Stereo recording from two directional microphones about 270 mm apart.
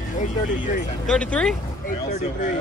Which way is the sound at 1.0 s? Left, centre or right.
Centre.